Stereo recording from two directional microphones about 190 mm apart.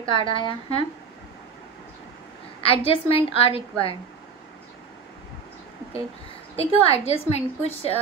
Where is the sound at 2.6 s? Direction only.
30° left (ahead or behind).